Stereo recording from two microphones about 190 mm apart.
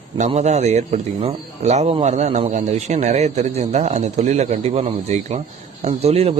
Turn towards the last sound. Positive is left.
turn(degrees=-35)  # may be behind; listen again after turning